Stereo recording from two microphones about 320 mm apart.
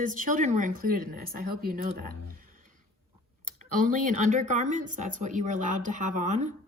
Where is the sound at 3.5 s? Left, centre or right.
Right.